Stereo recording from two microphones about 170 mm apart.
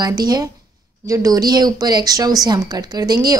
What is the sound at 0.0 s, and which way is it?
A woman's voice, 25° right (ahead or behind).